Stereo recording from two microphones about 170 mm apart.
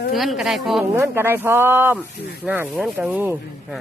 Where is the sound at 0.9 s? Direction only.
15° right (ahead or behind).